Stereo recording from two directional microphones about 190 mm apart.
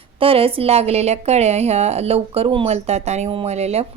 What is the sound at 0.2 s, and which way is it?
A woman's voice, 30° right (ahead or behind).